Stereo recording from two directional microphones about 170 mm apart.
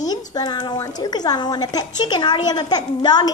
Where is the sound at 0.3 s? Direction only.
25° left (ahead or behind).